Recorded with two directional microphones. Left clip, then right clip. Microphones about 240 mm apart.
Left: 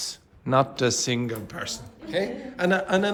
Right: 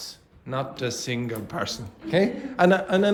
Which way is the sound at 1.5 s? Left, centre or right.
Centre.